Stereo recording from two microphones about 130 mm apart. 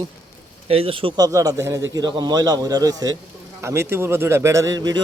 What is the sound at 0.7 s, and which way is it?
Speech, 45° right (ahead or behind).